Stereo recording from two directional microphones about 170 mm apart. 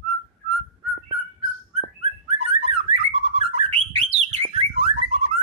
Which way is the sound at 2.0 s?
35° right (ahead or behind).